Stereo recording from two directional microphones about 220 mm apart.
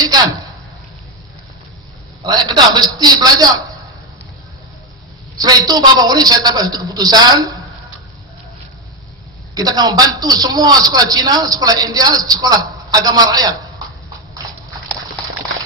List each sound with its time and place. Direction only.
2.2 s a man's voice: 20° right (ahead or behind)
5.4 s a man's voice: 15° right (ahead or behind)
9.5 s a man's voice: 15° right (ahead or behind)
15.5 s a sound: 60° left (ahead or behind)